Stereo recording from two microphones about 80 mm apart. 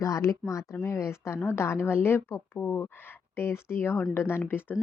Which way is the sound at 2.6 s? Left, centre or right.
Centre.